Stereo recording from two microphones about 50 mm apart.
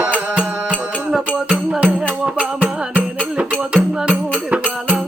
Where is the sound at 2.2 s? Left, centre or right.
Right.